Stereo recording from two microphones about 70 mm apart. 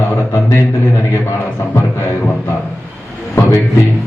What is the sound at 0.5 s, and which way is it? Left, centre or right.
A man's voice, left.